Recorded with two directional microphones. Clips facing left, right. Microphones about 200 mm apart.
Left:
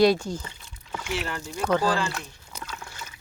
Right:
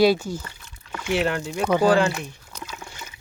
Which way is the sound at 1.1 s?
70° right (ahead or behind).